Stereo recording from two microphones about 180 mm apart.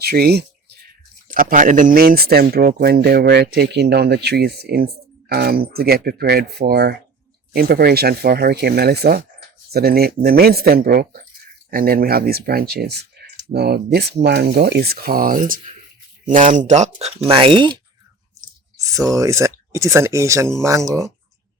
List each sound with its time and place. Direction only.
0.0 s speech: 60° right (ahead or behind)
1.3 s speech: 50° right (ahead or behind); by 17.7 s 30° right (ahead or behind)
18.3 s a sound: 20° right (ahead or behind)
19.0 s speech: 20° right (ahead or behind)